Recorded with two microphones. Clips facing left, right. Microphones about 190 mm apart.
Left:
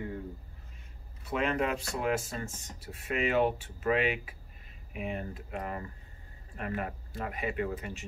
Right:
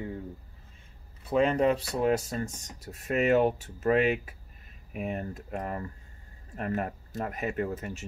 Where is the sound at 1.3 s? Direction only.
30° right (ahead or behind).